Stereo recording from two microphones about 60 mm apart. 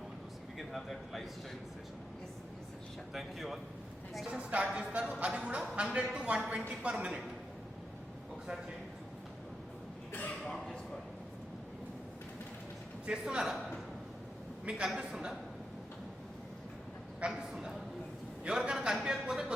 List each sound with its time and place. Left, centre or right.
0.7 s speech: centre
3.1 s speech: centre
4.3 s speech: centre
10.4 s a sound: centre
13.1 s a man's voice: centre
17.2 s speech: centre